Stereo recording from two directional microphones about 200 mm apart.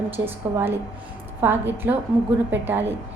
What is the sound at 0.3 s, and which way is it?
A woman's voice, 10° right (ahead or behind).